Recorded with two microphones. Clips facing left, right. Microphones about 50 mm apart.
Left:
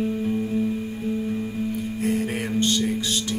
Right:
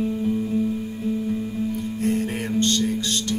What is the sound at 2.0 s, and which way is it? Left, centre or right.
Music, centre.